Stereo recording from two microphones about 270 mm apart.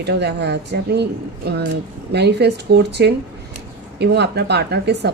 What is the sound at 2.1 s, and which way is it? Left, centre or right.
A woman's voice, right.